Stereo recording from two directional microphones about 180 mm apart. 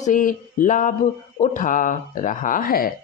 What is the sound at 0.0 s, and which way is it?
Speech, 45° left (ahead or behind).